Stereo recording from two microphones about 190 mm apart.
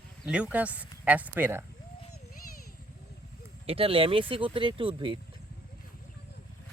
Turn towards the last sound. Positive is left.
turn(degrees=-25)  # may be behind; listen again after turning